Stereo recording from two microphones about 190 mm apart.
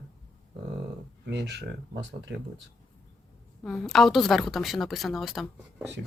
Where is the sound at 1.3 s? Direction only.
65° right (ahead or behind).